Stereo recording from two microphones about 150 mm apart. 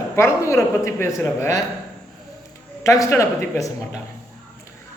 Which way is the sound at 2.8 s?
20° left (ahead or behind).